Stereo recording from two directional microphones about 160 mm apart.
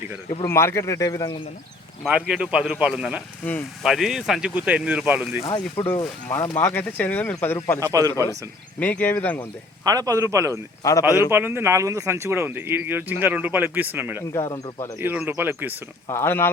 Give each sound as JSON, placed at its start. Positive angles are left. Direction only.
{"t": 0.4, "sound": "a man's voice", "side_deg": 15}
{"t": 2.0, "sound": "speech", "side_deg": -5}
{"t": 5.4, "sound": "a man's voice", "side_deg": 25}
{"t": 6.2, "sound": "speech", "side_deg": 15}
{"t": 7.8, "sound": "a man's voice", "side_deg": -20}
{"t": 8.8, "sound": "speech", "side_deg": 10}
{"t": 9.8, "sound": "a man's voice", "side_deg": -20}
{"t": 10.8, "sound": "a man's voice", "side_deg": 20}
{"t": 11.3, "sound": "speech", "side_deg": -15}
{"t": 14.2, "sound": "a man's voice", "side_deg": 25}
{"t": 14.9, "sound": "speech", "side_deg": -10}
{"t": 16.0, "sound": "speech", "side_deg": 15}